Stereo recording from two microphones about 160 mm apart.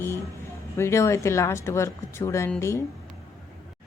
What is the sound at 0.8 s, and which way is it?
Speech, 15° left (ahead or behind).